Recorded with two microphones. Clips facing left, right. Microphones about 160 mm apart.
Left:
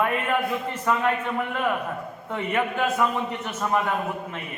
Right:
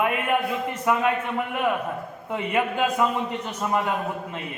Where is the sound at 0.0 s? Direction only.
15° right (ahead or behind).